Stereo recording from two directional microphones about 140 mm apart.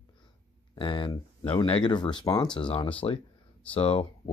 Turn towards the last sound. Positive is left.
turn(degrees=45)  # may be behind; listen again after turning